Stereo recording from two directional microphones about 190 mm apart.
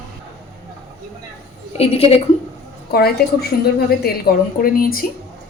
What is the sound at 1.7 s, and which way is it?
Speech, 30° left (ahead or behind).